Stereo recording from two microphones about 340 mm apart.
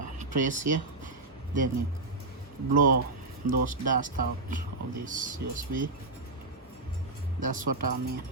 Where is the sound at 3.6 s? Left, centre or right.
Right.